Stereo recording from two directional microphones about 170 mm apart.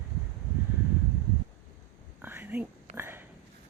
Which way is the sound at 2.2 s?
10° right (ahead or behind).